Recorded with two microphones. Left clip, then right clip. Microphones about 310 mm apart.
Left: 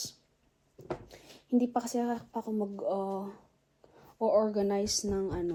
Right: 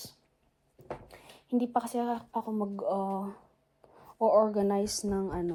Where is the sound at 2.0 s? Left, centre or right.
Centre.